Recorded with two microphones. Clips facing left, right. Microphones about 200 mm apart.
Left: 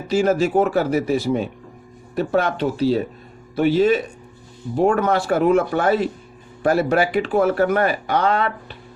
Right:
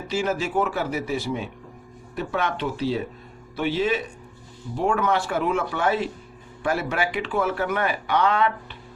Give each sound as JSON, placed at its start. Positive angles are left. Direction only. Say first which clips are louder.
{"t": 0.1, "sound": "speech", "louder": "left 8 dB", "side_deg": 40}